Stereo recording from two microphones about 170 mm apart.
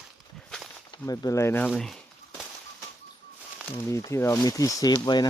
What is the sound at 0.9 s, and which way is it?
Speech, 20° left (ahead or behind).